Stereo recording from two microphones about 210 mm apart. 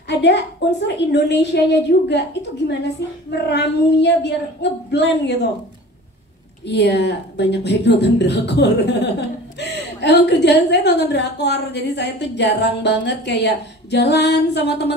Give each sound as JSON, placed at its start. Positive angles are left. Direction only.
{"t": 0.1, "sound": "a woman's voice", "side_deg": 55}
{"t": 6.6, "sound": "a woman's voice", "side_deg": 55}